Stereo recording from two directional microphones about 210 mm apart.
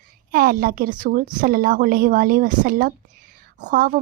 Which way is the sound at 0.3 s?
45° right (ahead or behind).